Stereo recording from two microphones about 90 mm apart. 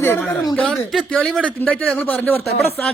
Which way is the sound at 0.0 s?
20° left (ahead or behind).